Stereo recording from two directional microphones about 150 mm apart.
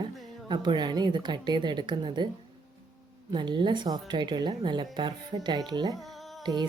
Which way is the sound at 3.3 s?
30° right (ahead or behind).